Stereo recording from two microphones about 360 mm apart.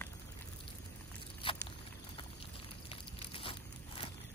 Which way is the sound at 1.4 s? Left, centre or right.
Centre.